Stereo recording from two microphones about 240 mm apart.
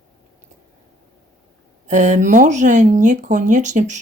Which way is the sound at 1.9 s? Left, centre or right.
Right.